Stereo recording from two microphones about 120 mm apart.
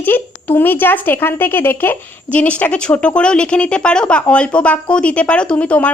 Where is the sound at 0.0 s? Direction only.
15° left (ahead or behind).